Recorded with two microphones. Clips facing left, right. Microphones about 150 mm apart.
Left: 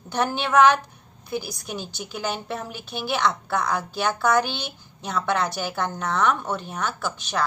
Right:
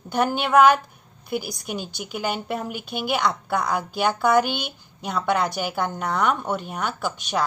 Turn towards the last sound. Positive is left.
turn(degrees=-15)  # may be behind; listen again after turning